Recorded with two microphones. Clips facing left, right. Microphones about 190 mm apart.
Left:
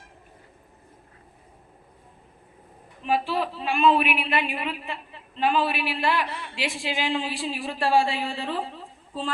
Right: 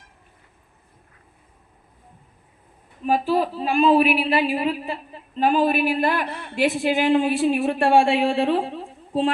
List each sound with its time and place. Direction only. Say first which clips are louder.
3.0 s a man's voice: right 5 dB; 40° right (ahead or behind); by 9.3 s 65° right (ahead or behind)